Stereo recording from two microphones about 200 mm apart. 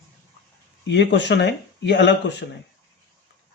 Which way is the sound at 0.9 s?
60° left (ahead or behind).